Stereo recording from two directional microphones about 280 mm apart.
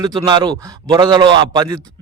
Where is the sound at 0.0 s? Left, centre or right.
Centre.